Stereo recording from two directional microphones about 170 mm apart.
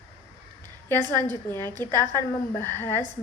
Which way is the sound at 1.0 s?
25° right (ahead or behind).